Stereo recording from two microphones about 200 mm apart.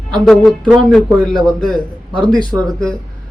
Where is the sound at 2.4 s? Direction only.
20° right (ahead or behind).